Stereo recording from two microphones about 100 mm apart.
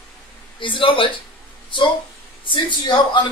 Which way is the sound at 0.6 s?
55° left (ahead or behind).